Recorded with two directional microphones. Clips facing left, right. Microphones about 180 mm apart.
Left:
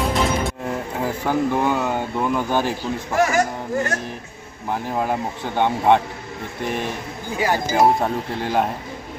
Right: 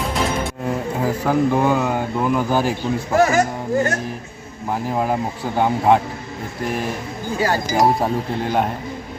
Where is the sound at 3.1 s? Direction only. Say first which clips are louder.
Right 3 dB; 35° right (ahead or behind).